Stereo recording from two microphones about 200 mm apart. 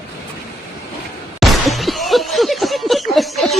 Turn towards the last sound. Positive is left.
turn(degrees=0)  # may be behind; listen again after turning